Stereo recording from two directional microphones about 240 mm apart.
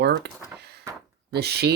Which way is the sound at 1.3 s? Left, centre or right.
Right.